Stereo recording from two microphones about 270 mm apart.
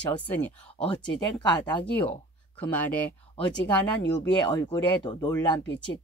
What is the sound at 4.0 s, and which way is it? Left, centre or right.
Speech, left.